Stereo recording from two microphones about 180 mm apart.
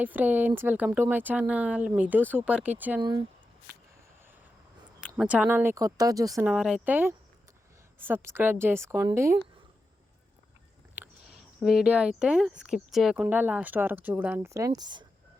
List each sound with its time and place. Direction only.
0.0 s speech: 10° right (ahead or behind)
3.0 s speech: 25° right (ahead or behind)
5.0 s speech: 5° right (ahead or behind)
10.9 s speech: 5° right (ahead or behind); by 15.0 s 25° right (ahead or behind)